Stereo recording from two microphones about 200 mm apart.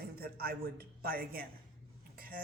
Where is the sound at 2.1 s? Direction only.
45° right (ahead or behind).